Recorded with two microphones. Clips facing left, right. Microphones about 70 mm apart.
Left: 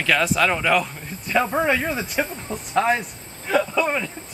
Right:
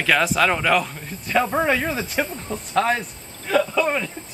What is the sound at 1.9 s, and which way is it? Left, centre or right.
Speech, centre.